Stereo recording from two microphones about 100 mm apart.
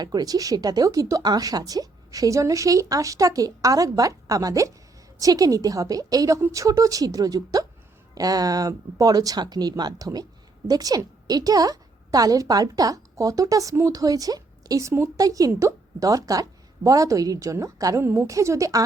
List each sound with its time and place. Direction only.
0.0 s a woman's voice: 40° right (ahead or behind)